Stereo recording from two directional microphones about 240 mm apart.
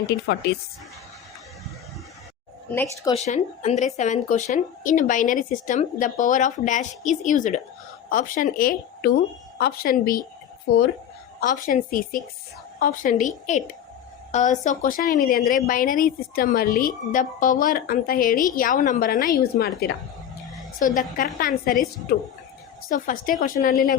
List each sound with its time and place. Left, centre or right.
2.7 s speech: centre
3.2 s speech: left
11.3 s speech: left
22.9 s speech: left